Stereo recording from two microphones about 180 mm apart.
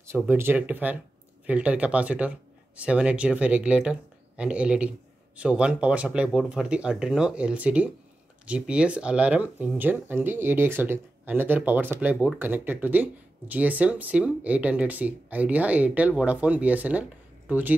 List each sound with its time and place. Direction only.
0.0 s speech: 15° right (ahead or behind)